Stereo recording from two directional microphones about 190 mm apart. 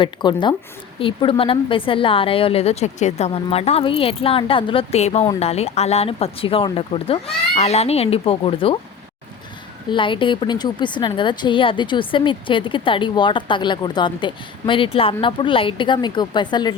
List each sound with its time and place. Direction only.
0.0 s a woman's voice: 25° left (ahead or behind)
9.9 s a woman's voice: 25° left (ahead or behind)